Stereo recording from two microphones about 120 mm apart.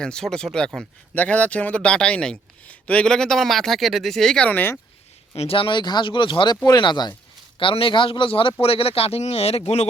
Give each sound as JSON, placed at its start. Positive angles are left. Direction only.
{"t": 0.0, "sound": "a man's voice", "side_deg": 5}
{"t": 5.3, "sound": "speech", "side_deg": 50}